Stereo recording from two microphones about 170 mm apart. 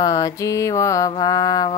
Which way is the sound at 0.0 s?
20° left (ahead or behind).